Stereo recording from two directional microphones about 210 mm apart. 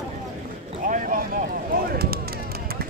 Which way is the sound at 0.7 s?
40° right (ahead or behind).